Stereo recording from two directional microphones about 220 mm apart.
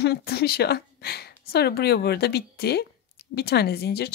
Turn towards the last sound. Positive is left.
turn(degrees=45)  # may be behind; listen again after turning